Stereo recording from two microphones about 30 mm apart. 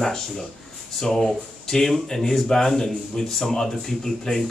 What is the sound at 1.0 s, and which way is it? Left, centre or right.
Speech, centre.